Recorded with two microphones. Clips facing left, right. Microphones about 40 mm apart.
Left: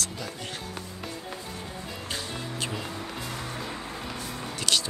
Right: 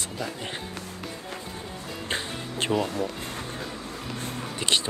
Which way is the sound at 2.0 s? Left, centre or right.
Right.